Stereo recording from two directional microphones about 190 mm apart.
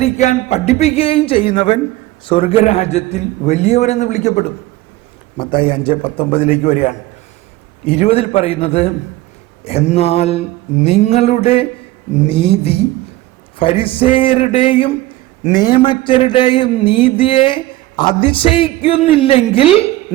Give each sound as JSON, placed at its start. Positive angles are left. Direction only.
{"t": 0.0, "sound": "a man's voice", "side_deg": 35}
{"t": 5.4, "sound": "a man's voice", "side_deg": 25}
{"t": 13.6, "sound": "a sound", "side_deg": 30}